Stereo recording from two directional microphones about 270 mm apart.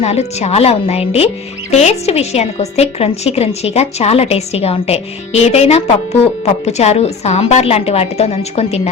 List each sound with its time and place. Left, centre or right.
0.0 s a woman's voice: left